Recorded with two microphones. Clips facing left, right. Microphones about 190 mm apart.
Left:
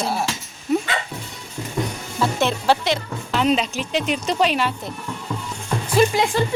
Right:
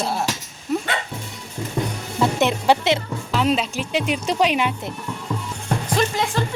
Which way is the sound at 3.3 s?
5° right (ahead or behind).